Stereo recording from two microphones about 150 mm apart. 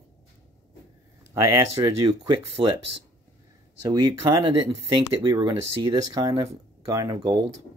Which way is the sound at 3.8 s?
25° right (ahead or behind).